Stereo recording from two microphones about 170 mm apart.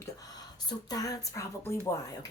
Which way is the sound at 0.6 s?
20° left (ahead or behind).